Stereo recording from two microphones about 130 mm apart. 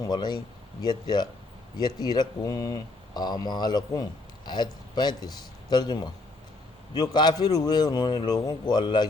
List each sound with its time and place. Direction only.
0.0 s speech: 35° left (ahead or behind)